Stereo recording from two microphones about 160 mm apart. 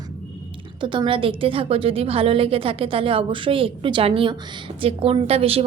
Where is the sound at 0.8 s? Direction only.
30° right (ahead or behind).